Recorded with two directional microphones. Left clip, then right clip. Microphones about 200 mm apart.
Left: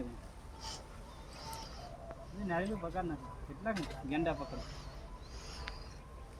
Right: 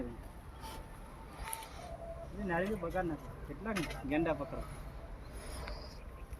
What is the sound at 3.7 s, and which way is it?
Speech, 20° left (ahead or behind).